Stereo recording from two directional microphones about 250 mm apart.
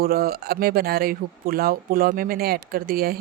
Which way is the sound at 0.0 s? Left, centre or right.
Right.